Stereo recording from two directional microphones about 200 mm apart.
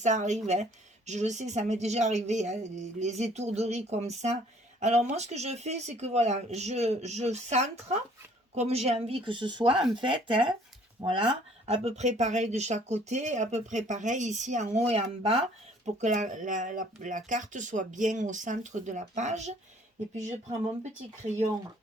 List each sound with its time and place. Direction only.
0.0 s speech: 35° right (ahead or behind)